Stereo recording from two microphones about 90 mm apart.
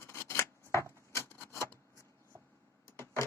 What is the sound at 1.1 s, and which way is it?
Rub, 25° left (ahead or behind).